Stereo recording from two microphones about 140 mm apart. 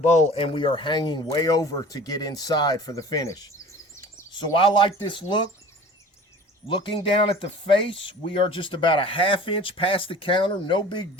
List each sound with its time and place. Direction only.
0.1 s speech: 60° left (ahead or behind)
0.5 s speech: 40° left (ahead or behind)
4.4 s speech: 35° left (ahead or behind)
6.7 s speech: 35° left (ahead or behind)